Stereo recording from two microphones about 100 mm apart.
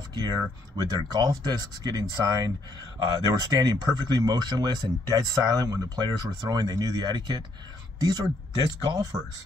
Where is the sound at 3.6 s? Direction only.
45° right (ahead or behind).